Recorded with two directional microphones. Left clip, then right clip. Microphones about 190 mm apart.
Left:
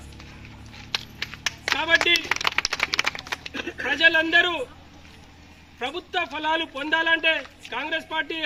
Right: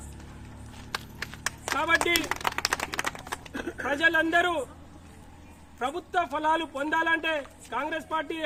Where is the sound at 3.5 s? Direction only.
5° right (ahead or behind).